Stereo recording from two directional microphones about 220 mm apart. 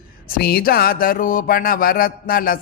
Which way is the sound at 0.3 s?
45° left (ahead or behind).